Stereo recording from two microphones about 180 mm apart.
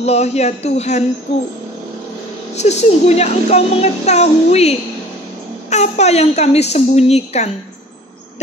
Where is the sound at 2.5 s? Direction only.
40° left (ahead or behind).